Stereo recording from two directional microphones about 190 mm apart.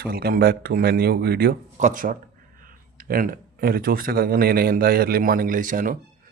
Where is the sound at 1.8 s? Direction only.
45° right (ahead or behind).